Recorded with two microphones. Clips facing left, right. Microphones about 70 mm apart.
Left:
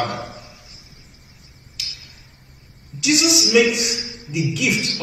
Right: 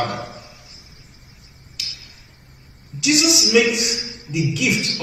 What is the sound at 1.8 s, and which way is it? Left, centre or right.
Tick-tock, centre.